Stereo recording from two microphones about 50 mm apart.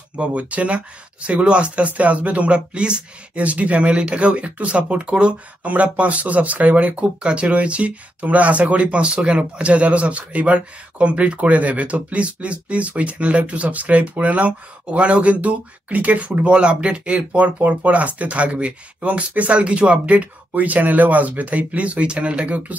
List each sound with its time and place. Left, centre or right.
0.2 s speech: right